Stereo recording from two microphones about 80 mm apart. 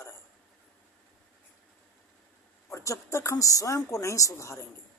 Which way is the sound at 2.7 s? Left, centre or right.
Left.